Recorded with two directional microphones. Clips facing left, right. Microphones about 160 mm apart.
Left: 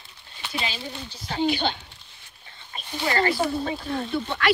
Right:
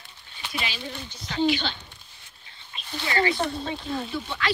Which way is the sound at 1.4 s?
45° left (ahead or behind).